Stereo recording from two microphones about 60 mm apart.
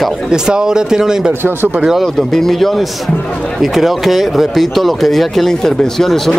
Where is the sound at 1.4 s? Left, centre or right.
Right.